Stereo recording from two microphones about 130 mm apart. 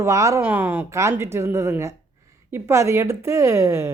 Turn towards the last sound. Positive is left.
turn(degrees=-20)  # may be behind; listen again after turning